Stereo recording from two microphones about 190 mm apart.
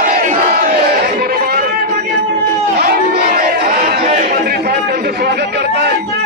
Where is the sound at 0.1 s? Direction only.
45° right (ahead or behind).